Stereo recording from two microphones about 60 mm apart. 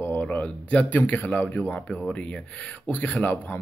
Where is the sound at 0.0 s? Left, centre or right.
Left.